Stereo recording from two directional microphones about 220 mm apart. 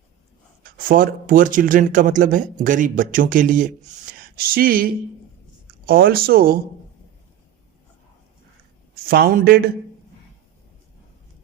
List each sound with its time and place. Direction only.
0.6 s speech: 40° right (ahead or behind)
9.0 s speech: 40° right (ahead or behind)